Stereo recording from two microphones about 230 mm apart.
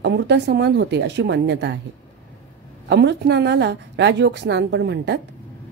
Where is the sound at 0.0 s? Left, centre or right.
Right.